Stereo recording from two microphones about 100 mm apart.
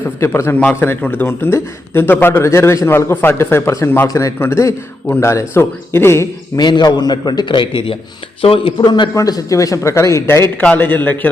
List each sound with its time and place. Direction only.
0.2 s a man's voice: 25° left (ahead or behind)
4.0 s a man's voice: 35° left (ahead or behind)
6.6 s a man's voice: 45° left (ahead or behind)
8.4 s speech: 65° left (ahead or behind)
8.8 s a man's voice: 50° left (ahead or behind)
9.1 s a man's voice: 35° left (ahead or behind); by 11.3 s 20° left (ahead or behind)